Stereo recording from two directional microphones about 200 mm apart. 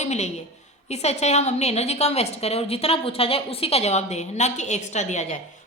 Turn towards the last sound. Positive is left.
turn(degrees=35)  # may be behind; listen again after turning